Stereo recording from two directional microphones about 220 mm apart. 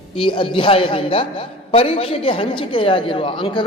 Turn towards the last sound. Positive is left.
turn(degrees=20)  # may be behind; listen again after turning